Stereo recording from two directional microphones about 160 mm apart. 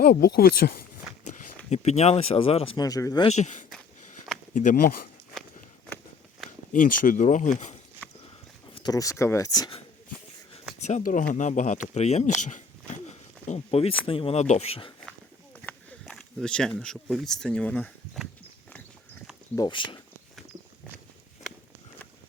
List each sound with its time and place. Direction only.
0.0 s speech: 80° left
1.7 s speech: 45° left (ahead or behind)
2.7 s speech: 20° left (ahead or behind)
3.2 s speech: 45° left (ahead or behind)
6.7 s speech: 60° left (ahead or behind)
8.7 s speech: 25° left (ahead or behind)
10.8 s speech: 50° left (ahead or behind)
13.5 s speech: 40° left (ahead or behind)
15.6 s speech: 5° left (ahead or behind)
19.5 s speech: 30° left (ahead or behind)